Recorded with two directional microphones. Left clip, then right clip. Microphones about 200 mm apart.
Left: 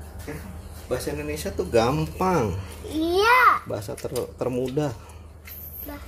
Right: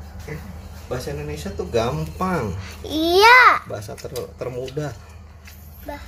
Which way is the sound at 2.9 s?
25° right (ahead or behind).